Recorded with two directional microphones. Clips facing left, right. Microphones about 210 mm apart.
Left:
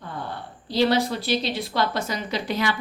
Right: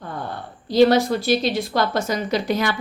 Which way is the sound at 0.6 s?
45° right (ahead or behind).